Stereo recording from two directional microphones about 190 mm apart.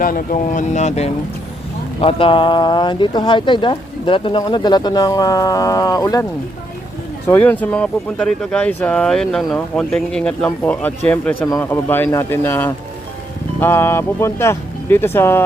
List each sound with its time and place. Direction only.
0.0 s speech: 45° left (ahead or behind); by 6.2 s 20° left (ahead or behind)
7.3 s speech: 10° left (ahead or behind)